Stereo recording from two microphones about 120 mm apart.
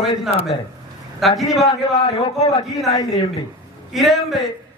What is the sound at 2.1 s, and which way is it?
Speech, 55° left (ahead or behind).